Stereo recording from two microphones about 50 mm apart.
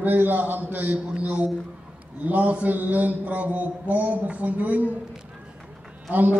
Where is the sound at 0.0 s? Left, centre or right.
Right.